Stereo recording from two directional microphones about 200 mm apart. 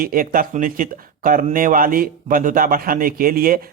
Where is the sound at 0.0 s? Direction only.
45° right (ahead or behind).